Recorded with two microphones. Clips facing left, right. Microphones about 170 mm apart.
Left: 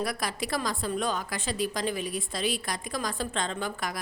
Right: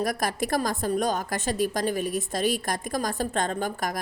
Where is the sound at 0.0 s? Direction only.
45° right (ahead or behind).